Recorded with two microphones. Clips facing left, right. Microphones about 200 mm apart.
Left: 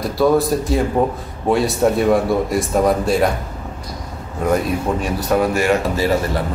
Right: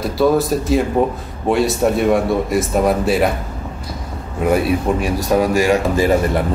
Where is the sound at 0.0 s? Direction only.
Centre (ahead or behind).